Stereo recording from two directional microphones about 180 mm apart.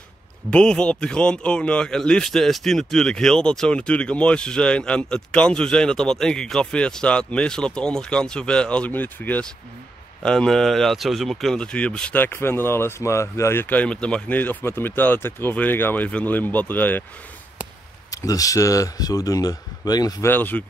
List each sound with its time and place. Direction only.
0.5 s a man's voice: 5° left (ahead or behind)
18.1 s speech: 20° left (ahead or behind)